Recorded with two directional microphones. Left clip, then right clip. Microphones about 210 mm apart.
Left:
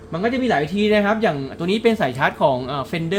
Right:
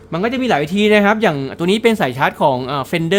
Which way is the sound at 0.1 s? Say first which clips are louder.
Right 3 dB; 40° right (ahead or behind).